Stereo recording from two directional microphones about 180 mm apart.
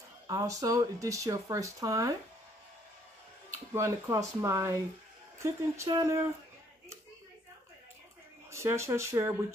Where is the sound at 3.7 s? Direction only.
15° right (ahead or behind).